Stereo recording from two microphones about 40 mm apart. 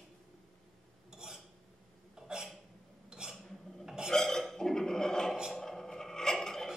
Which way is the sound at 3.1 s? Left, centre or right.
Centre.